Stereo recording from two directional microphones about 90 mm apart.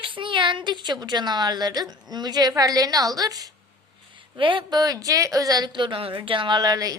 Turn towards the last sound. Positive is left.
turn(degrees=-45)  # may be behind; listen again after turning